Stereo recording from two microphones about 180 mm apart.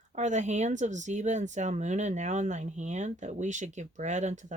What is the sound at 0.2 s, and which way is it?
Speech, 40° right (ahead or behind).